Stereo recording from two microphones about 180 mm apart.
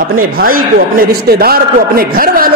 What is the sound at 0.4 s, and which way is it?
A man's voice, 55° right (ahead or behind).